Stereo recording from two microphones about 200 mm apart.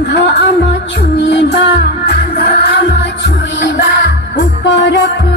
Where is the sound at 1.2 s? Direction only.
60° left (ahead or behind).